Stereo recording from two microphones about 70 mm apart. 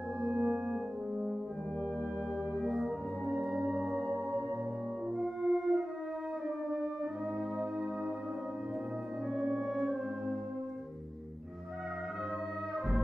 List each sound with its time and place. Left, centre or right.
0.2 s music: centre
2.6 s music: centre
3.3 s music: centre
3.9 s music: right
5.1 s music: centre
9.3 s music: centre